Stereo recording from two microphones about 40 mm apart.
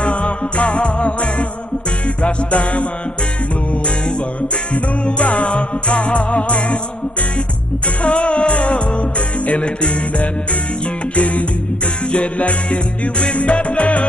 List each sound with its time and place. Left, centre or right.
0.0 s music: left
5.0 s music: left
8.0 s music: left